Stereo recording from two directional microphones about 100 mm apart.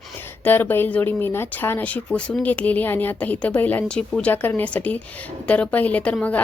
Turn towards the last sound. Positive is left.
turn(degrees=15)  # may be behind; listen again after turning